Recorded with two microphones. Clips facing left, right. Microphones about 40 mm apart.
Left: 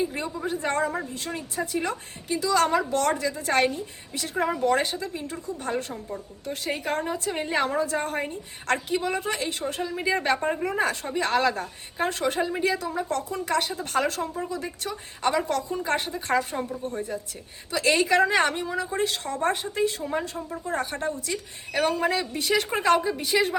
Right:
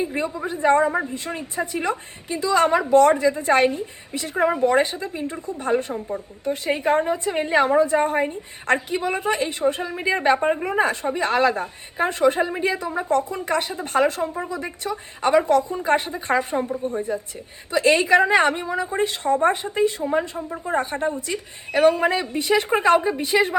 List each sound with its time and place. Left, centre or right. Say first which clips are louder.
0.0 s speech: right 3 dB; right
3.7 s speech: right 5 dB; right